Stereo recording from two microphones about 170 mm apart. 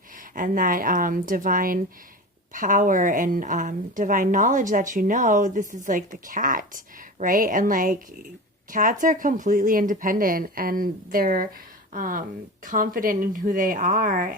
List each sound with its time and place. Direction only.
0.3 s a woman's voice: 50° right (ahead or behind)